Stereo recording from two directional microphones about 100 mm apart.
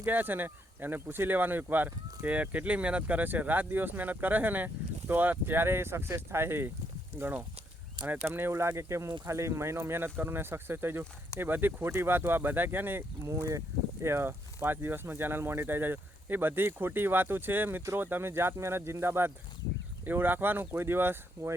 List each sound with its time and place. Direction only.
0.0 s speech: 20° right (ahead or behind)